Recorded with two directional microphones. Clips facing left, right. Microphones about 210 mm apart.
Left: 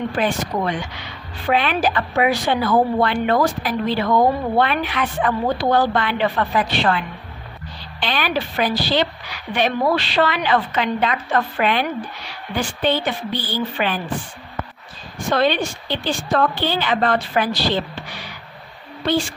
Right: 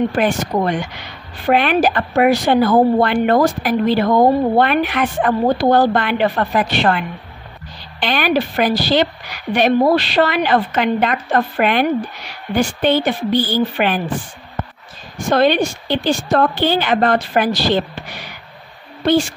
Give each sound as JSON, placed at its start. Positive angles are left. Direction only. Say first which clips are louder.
{"t": 0.1, "sound": "a woman's voice", "louder": "right 4 dB", "side_deg": -45}
{"t": 4.6, "sound": "a woman's voice", "louder": "right 4 dB", "side_deg": -50}
{"t": 15.1, "sound": "a woman's voice", "louder": "right 5 dB", "side_deg": -45}